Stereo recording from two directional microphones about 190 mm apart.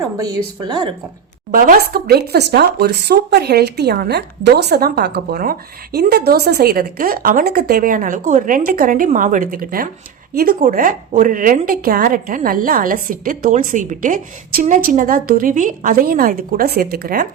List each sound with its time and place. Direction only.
0.6 s speech: 25° right (ahead or behind)
1.5 s speech: 45° right (ahead or behind)